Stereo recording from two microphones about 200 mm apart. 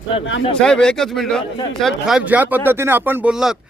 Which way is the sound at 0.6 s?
5° left (ahead or behind).